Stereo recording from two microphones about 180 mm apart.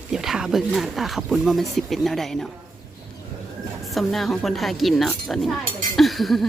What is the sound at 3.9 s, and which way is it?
Speech, centre (ahead or behind).